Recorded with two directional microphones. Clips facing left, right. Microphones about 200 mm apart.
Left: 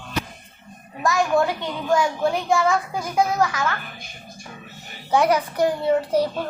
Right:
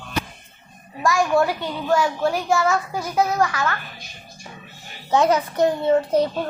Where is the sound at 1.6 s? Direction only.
20° left (ahead or behind).